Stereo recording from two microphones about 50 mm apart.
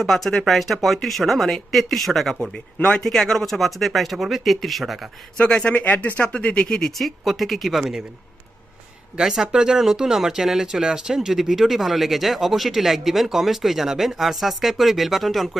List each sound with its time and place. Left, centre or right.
0.0 s speech: centre
5.4 s speech: left
6.9 s speech: centre
9.1 s speech: centre